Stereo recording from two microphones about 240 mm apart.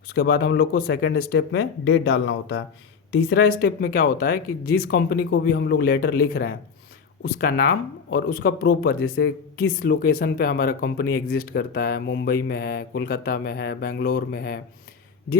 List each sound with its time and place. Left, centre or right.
0.1 s speech: left